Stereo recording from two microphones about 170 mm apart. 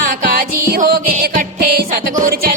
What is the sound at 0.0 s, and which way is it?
Music, 60° right (ahead or behind).